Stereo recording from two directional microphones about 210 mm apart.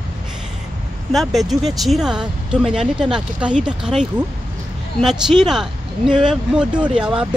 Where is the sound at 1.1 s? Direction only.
Centre (ahead or behind).